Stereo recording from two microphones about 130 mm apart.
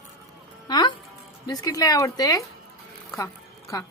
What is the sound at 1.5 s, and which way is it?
Speech, 30° left (ahead or behind).